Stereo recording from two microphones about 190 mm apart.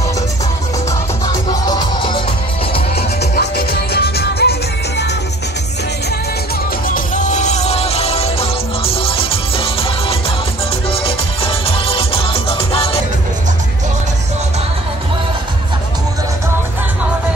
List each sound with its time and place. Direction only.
1.2 s music: 20° left (ahead or behind)
3.0 s music: 55° left (ahead or behind)
6.9 s music: 40° left (ahead or behind)